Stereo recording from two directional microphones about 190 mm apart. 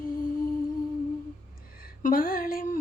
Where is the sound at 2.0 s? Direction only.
45° left (ahead or behind).